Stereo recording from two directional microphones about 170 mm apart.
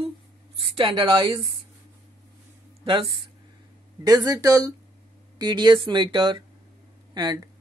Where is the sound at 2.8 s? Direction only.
30° right (ahead or behind).